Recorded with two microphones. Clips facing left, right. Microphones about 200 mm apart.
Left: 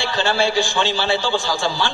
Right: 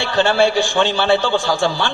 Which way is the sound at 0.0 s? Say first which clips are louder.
Right 5 dB; 60° right (ahead or behind).